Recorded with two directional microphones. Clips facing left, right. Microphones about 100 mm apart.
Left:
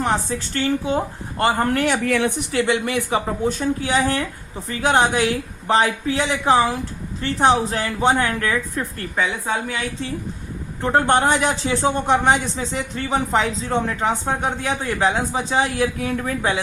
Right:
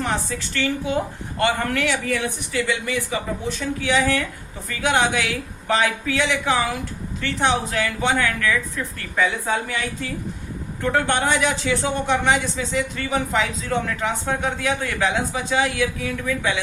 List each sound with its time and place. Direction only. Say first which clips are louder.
0.0 s speech: left 3 dB; 35° left (ahead or behind)
2.0 s speech: left 5 dB; 70° left (ahead or behind)
2.5 s speech: left 1 dB; 55° left (ahead or behind); by 8.5 s 35° left (ahead or behind)
10.8 s speech: left 4 dB; 30° left (ahead or behind)